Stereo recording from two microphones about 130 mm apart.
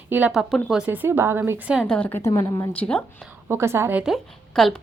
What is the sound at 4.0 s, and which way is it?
Speech, centre (ahead or behind).